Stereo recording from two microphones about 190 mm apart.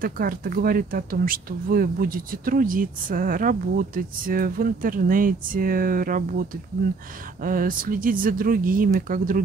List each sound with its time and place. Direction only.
0.0 s speech: 50° right (ahead or behind)
7.4 s speech: 45° right (ahead or behind)